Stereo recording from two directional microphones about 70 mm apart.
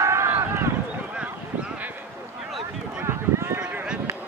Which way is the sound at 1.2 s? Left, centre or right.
Centre.